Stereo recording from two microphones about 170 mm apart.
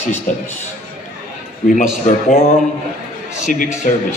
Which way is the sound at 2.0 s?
45° left (ahead or behind).